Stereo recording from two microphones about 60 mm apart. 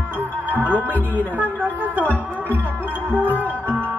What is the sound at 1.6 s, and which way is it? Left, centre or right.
Music, right.